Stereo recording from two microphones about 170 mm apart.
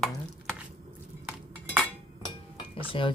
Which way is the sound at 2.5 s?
30° left (ahead or behind).